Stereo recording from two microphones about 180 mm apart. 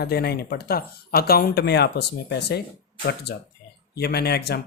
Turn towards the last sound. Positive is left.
turn(degrees=65)  # may be behind; listen again after turning